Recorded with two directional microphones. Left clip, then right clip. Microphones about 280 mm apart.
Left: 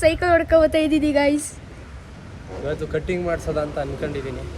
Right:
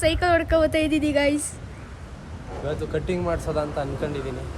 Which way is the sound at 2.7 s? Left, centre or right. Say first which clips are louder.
Left 2 dB; centre.